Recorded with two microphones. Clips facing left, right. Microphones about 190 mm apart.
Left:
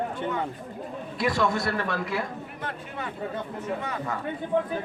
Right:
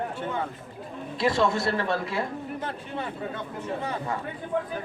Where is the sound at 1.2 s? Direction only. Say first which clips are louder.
Right 2 dB; 25° right (ahead or behind).